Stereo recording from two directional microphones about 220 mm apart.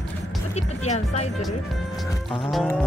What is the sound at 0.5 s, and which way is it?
Speech, 30° left (ahead or behind).